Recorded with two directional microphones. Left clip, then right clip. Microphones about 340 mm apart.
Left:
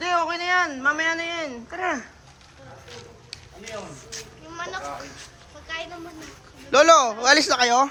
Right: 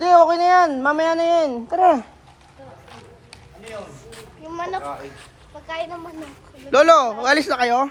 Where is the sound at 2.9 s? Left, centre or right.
Centre.